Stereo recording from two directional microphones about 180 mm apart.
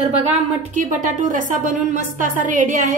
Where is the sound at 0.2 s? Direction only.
40° right (ahead or behind).